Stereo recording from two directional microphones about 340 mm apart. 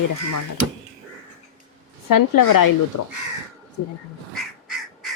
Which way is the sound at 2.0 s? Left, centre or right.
Left.